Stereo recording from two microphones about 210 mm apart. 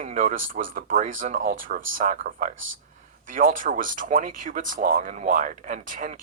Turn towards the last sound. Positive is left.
turn(degrees=-40)  # may be behind; listen again after turning